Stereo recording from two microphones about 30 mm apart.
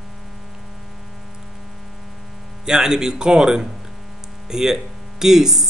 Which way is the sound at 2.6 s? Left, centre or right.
Centre.